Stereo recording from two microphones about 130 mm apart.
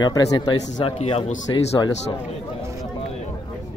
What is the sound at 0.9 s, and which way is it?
Speech, 50° left (ahead or behind).